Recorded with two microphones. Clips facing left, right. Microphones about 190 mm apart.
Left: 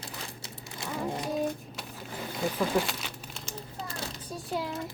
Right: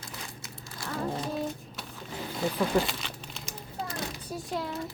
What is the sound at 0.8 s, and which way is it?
Music, 15° left (ahead or behind).